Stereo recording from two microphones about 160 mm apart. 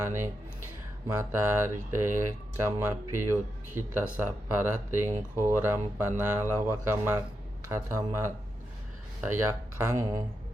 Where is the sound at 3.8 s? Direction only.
15° right (ahead or behind).